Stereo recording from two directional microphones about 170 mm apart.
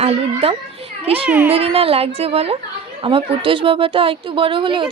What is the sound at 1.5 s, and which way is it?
A woman's voice, 35° right (ahead or behind).